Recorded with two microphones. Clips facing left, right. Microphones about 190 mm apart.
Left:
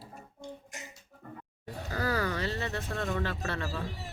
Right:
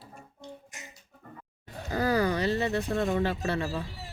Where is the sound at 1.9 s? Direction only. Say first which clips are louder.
Right 6 dB; 20° right (ahead or behind).